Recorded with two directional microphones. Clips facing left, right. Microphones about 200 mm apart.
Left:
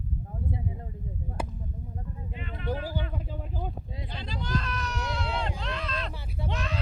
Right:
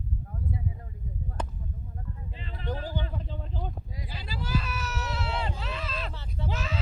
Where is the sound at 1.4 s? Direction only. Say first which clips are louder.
Left 2 dB; 10° left (ahead or behind).